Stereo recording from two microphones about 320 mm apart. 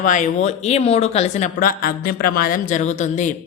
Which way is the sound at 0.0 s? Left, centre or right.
Left.